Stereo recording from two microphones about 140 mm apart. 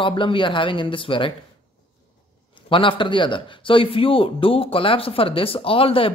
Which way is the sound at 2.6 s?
40° left (ahead or behind).